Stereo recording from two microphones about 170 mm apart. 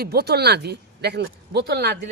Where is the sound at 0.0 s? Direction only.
70° right (ahead or behind).